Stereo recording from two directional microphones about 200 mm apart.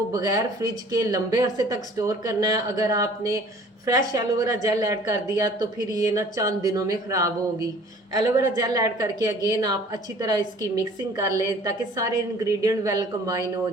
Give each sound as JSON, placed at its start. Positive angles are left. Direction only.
{"t": 0.1, "sound": "a woman's voice", "side_deg": -20}